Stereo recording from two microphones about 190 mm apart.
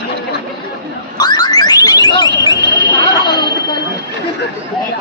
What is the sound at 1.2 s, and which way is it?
Car alarm, 20° left (ahead or behind).